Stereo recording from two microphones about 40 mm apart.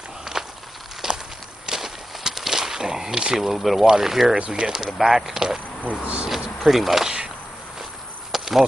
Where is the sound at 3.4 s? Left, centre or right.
Centre.